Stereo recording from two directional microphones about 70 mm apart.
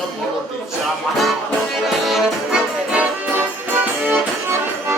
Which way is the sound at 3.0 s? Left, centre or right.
Right.